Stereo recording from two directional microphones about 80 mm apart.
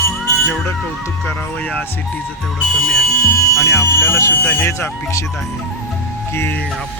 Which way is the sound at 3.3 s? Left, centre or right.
Left.